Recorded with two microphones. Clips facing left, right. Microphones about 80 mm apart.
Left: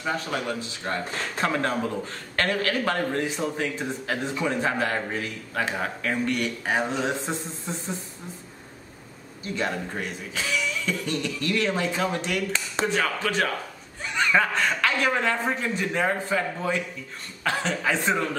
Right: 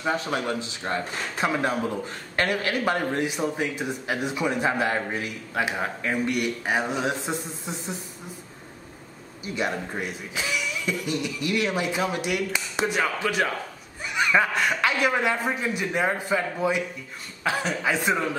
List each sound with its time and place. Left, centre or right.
0.0 s a man's voice: right
9.4 s a man's voice: centre